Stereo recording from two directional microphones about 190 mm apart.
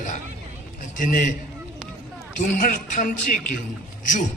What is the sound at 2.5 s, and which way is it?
A man's voice, 45° left (ahead or behind).